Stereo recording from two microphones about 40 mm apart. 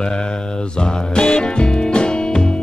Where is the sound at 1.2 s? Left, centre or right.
Left.